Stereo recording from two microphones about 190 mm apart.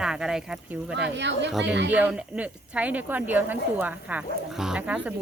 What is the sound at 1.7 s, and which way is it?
Speech, 65° right (ahead or behind).